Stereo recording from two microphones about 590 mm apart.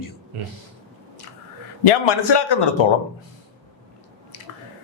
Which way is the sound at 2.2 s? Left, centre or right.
Left.